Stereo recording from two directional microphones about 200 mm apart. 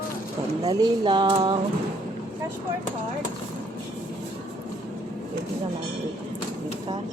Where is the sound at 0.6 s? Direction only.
20° right (ahead or behind).